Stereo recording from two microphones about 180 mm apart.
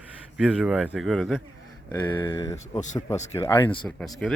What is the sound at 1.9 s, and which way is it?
Speech, 20° left (ahead or behind).